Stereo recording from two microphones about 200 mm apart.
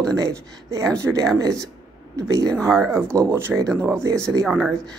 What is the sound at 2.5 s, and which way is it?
Speech, 5° left (ahead or behind).